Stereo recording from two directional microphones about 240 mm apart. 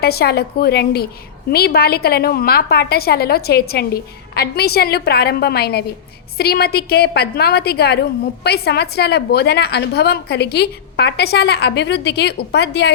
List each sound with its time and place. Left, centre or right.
0.0 s a woman's voice: left